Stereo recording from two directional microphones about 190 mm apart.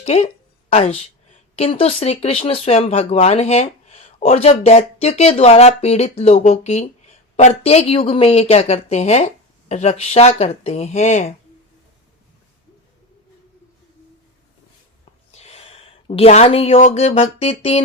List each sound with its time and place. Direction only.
0.0 s speech: 35° left (ahead or behind)
15.3 s speech: 35° left (ahead or behind)